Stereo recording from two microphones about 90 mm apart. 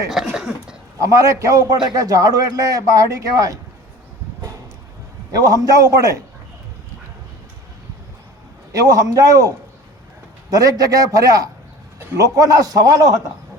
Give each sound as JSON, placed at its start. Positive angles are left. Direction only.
{"t": 0.3, "sound": "a sound", "side_deg": -10}
{"t": 0.9, "sound": "a man's voice", "side_deg": -40}
{"t": 5.3, "sound": "a man's voice", "side_deg": -40}
{"t": 8.7, "sound": "a man's voice", "side_deg": -40}